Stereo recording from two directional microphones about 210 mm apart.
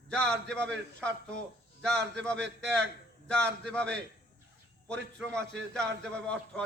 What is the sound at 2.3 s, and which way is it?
Speech, 55° right (ahead or behind).